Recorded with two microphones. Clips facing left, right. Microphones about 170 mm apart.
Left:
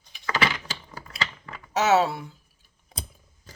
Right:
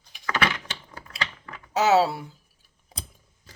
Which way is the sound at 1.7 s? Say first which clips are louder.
Right 1 dB; 30° right (ahead or behind).